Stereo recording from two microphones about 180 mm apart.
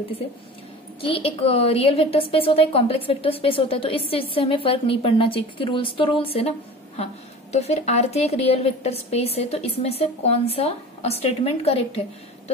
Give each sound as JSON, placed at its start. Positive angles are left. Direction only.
{"t": 1.0, "sound": "a woman's voice", "side_deg": 30}
{"t": 7.5, "sound": "a woman's voice", "side_deg": 35}